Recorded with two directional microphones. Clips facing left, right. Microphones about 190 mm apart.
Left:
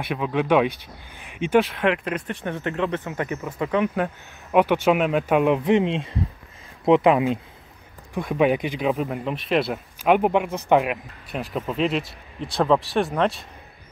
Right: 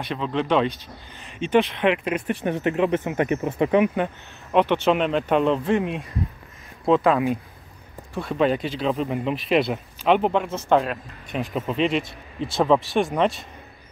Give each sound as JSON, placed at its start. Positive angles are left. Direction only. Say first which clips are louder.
{"t": 0.0, "sound": "speech", "louder": "left 1 dB", "side_deg": 10}
{"t": 2.4, "sound": "speech", "louder": "right 4 dB", "side_deg": -15}
{"t": 3.9, "sound": "speech", "louder": "even", "side_deg": 5}
{"t": 8.9, "sound": "speech", "louder": "right 2 dB", "side_deg": 0}
{"t": 11.3, "sound": "speech", "louder": "right 1 dB", "side_deg": 0}